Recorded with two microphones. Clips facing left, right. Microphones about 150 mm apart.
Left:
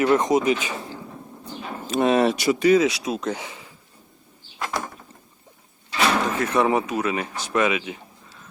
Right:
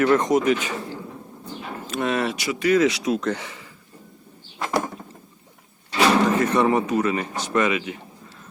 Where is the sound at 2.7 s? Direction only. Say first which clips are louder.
Even; 15° left (ahead or behind).